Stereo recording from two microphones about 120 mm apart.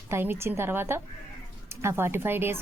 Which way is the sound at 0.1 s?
20° right (ahead or behind).